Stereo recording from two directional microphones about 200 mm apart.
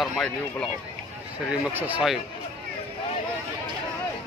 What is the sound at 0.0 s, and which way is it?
Speech, 5° left (ahead or behind).